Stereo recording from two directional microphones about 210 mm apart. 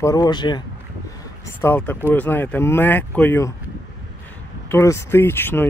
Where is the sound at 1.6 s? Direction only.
10° left (ahead or behind).